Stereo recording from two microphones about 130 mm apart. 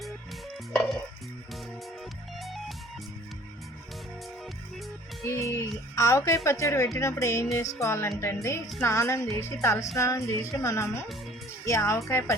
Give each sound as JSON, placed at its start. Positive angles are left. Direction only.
{"t": 2.4, "sound": "music", "side_deg": 0}
{"t": 5.2, "sound": "music", "side_deg": 20}
{"t": 6.9, "sound": "speech", "side_deg": 25}